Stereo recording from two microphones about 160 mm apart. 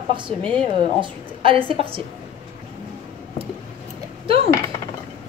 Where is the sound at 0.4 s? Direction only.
5° left (ahead or behind).